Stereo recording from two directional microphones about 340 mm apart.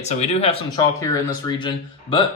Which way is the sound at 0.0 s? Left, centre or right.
Centre.